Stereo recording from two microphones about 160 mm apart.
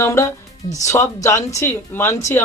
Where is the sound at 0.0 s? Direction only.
15° left (ahead or behind).